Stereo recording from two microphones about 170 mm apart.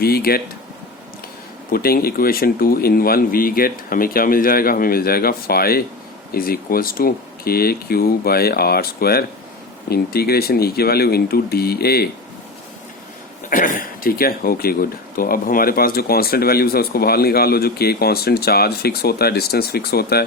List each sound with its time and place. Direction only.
0.0 s speech: 65° left (ahead or behind)
1.7 s speech: 60° left (ahead or behind)
13.5 s speech: 55° left (ahead or behind)